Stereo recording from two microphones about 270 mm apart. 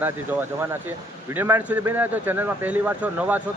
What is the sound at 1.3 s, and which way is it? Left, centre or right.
A man's voice, centre.